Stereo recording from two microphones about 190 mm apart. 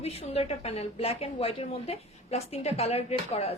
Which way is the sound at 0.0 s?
30° left (ahead or behind).